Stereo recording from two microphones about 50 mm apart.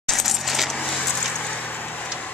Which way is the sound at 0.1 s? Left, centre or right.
Centre.